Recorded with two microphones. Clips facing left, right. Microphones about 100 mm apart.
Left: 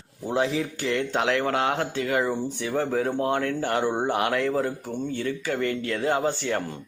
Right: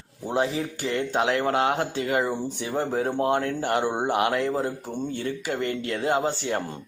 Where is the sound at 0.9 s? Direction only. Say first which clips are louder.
Right 1 dB; 20° right (ahead or behind).